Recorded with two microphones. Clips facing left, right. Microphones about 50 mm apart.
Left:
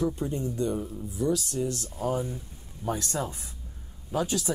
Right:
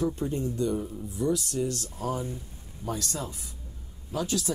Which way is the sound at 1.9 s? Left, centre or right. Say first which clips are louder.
Left 2 dB; centre.